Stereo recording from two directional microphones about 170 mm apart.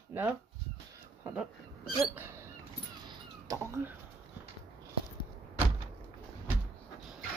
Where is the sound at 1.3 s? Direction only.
5° right (ahead or behind).